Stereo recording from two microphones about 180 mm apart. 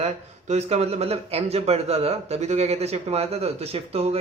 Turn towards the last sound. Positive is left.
turn(degrees=-35)  # may be behind; listen again after turning